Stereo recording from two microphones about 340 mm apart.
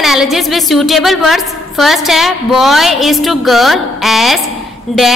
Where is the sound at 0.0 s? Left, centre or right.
Centre.